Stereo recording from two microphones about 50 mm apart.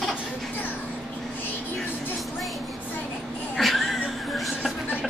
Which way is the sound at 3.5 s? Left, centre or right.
Centre.